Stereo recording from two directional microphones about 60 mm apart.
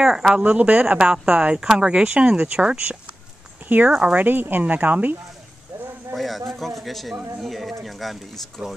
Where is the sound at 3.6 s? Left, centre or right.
Right.